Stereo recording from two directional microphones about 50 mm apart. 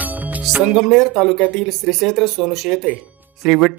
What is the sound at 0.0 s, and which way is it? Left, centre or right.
Music, right.